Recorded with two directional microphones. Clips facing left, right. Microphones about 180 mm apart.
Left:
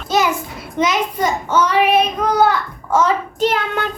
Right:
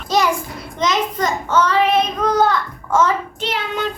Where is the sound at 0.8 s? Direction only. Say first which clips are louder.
Left 2 dB; 10° left (ahead or behind).